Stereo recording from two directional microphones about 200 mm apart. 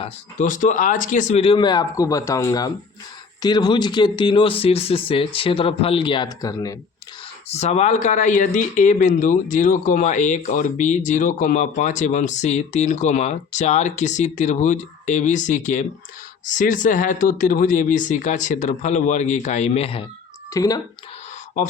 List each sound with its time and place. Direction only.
0.0 s speech: 40° left (ahead or behind); by 6.7 s 20° left (ahead or behind)
7.4 s speech: 35° left (ahead or behind)
20.5 s speech: 20° left (ahead or behind)